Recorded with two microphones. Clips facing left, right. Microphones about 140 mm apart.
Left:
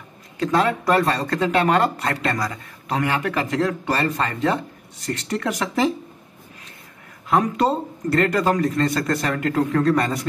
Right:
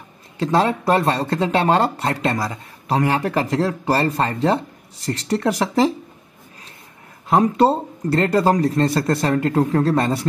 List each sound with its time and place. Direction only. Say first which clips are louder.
0.4 s speech: right 2 dB; 30° right (ahead or behind)
7.2 s speech: right 4 dB; 30° right (ahead or behind)